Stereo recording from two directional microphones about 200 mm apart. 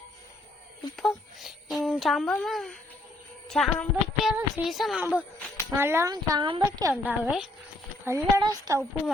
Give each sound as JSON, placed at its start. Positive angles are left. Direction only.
{"t": 0.9, "sound": "speech", "side_deg": 0}
{"t": 5.7, "sound": "speech", "side_deg": -10}
{"t": 6.9, "sound": "speech", "side_deg": -5}
{"t": 8.0, "sound": "speech", "side_deg": -15}